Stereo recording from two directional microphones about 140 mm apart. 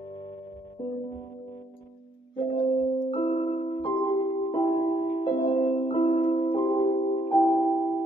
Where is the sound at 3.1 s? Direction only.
40° left (ahead or behind).